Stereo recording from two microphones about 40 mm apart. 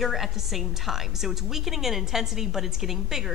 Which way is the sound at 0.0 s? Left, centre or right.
Centre.